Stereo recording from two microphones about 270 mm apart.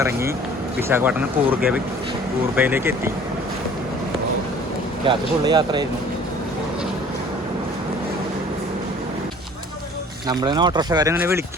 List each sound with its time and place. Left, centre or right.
0.0 s speech: centre
5.0 s speech: centre
10.2 s speech: centre